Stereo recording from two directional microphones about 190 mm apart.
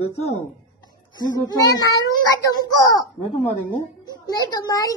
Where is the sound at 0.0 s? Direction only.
35° left (ahead or behind).